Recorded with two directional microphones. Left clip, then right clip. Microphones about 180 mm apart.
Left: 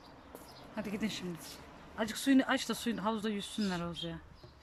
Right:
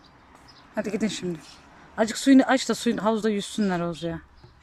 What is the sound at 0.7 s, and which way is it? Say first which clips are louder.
Speech: right 11 dB; 30° right (ahead or behind).